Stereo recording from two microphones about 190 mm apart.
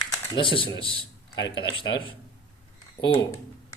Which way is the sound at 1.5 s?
20° left (ahead or behind).